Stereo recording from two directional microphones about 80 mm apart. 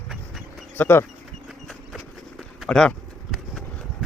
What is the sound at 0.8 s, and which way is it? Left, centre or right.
Speech, left.